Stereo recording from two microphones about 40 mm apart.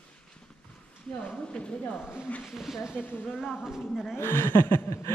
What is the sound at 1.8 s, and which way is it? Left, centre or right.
Speech, left.